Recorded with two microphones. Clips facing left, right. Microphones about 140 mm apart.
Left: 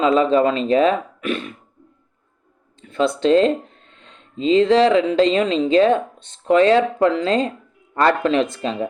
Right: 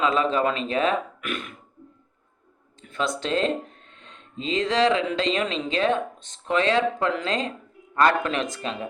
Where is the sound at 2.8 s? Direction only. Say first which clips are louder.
Left 8 dB; 30° left (ahead or behind).